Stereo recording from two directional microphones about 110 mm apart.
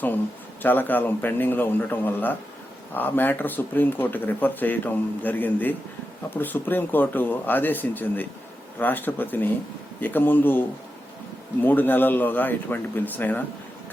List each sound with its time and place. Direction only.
0.6 s speech: 15° left (ahead or behind)